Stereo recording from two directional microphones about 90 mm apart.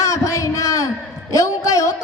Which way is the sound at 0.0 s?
35° left (ahead or behind).